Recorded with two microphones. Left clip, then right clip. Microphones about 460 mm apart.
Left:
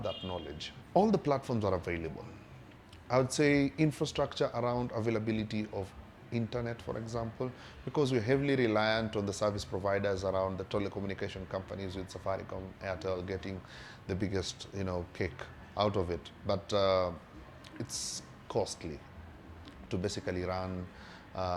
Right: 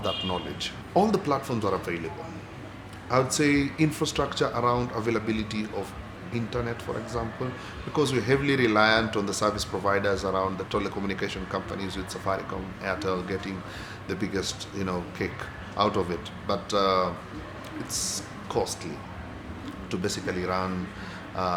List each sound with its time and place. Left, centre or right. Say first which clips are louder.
0.9 s speech: right 5 dB; left
3.1 s a man's voice: right 5 dB; left
19.9 s a man's voice: right 6 dB; left